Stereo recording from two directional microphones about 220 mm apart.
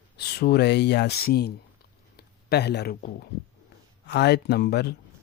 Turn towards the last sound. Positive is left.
turn(degrees=45)  # may be behind; listen again after turning